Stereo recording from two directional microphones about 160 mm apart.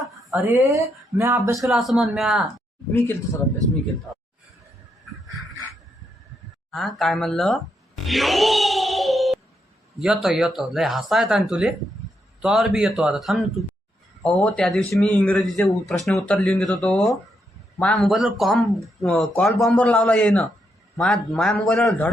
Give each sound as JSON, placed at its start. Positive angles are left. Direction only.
{"t": 0.3, "sound": "speech", "side_deg": -20}
{"t": 1.5, "sound": "speech", "side_deg": 0}
{"t": 6.7, "sound": "a sound", "side_deg": 0}
{"t": 10.0, "sound": "a man's voice", "side_deg": 0}